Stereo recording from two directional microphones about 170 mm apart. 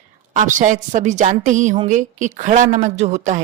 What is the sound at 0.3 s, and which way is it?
Speech, 45° right (ahead or behind).